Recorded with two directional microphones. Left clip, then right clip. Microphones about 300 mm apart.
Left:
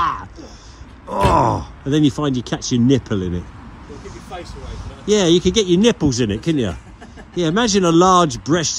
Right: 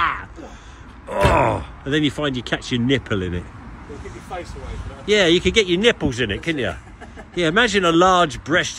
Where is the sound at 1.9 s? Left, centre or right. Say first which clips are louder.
Left 3 dB; centre.